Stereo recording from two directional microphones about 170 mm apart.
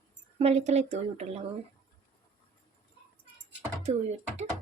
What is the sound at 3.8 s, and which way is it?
Speech, 40° right (ahead or behind).